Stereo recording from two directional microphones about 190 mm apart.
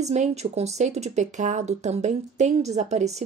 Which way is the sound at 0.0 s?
35° right (ahead or behind).